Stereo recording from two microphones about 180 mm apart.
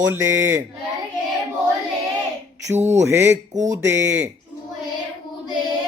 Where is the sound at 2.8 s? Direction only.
15° right (ahead or behind).